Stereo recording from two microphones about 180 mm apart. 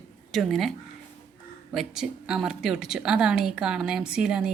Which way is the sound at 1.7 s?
5° right (ahead or behind).